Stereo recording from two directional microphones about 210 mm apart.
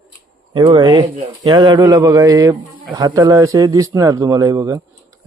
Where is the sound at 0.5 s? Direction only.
20° right (ahead or behind).